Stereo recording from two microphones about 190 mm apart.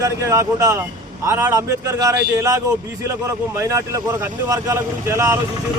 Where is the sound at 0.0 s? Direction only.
15° right (ahead or behind).